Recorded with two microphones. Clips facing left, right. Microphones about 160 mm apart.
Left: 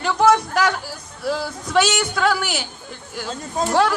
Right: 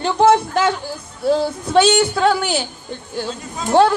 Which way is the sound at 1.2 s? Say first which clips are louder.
Right 7 dB; 25° right (ahead or behind).